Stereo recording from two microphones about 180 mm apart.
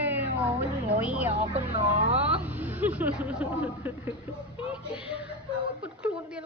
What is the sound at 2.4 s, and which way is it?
A woman's voice, 10° right (ahead or behind).